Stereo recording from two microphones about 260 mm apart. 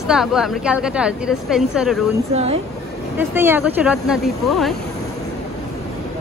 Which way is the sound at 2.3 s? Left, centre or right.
Right.